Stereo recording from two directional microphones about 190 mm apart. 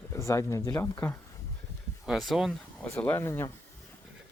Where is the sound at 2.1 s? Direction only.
Centre (ahead or behind).